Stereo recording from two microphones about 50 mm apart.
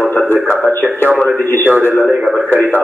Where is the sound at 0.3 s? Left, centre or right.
Left.